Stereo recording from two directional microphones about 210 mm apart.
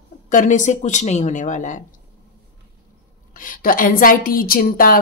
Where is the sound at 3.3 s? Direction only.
40° left (ahead or behind).